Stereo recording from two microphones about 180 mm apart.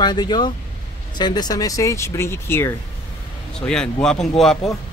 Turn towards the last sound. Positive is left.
turn(degrees=0)  # may be behind; listen again after turning